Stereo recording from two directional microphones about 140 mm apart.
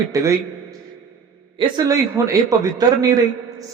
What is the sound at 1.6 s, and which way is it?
A man's voice, 25° right (ahead or behind).